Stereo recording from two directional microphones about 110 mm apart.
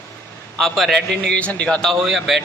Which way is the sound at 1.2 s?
10° left (ahead or behind).